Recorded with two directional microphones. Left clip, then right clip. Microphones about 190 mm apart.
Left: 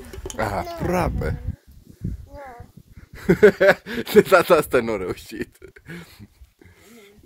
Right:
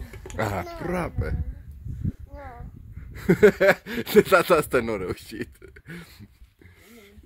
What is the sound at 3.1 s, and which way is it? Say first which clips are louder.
Speech: left 3 dB; 10° right (ahead or behind).